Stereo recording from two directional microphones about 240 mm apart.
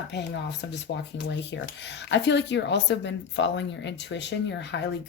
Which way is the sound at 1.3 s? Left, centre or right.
Left.